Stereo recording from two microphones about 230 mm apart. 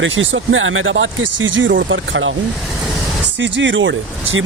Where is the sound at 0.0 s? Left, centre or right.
Right.